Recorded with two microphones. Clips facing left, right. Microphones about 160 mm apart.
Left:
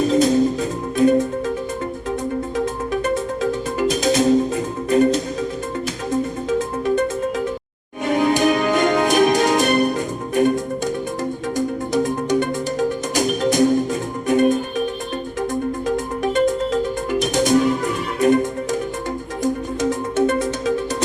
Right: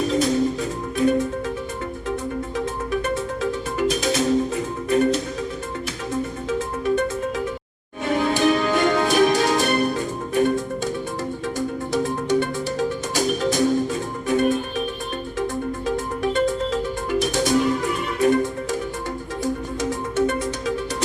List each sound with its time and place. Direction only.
0.1 s music: 45° left (ahead or behind)
3.0 s music: 40° left (ahead or behind)
8.0 s music: 15° left (ahead or behind)
16.3 s music: 20° left (ahead or behind)
20.2 s music: 45° left (ahead or behind)